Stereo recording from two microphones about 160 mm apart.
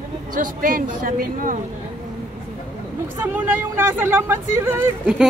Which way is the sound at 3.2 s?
10° right (ahead or behind).